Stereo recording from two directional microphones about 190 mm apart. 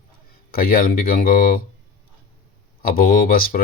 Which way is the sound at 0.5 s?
50° left (ahead or behind).